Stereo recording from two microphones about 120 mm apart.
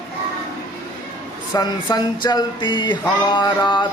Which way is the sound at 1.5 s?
35° left (ahead or behind).